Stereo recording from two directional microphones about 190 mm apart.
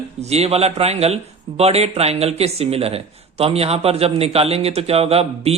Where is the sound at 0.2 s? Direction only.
35° right (ahead or behind).